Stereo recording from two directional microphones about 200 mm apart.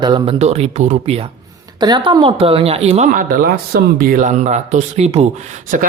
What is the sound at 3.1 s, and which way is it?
Speech, 45° right (ahead or behind).